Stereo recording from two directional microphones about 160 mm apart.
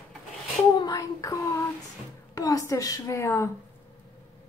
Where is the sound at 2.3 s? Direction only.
20° left (ahead or behind).